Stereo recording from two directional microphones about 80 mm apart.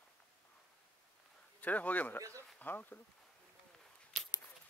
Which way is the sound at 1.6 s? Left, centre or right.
Centre.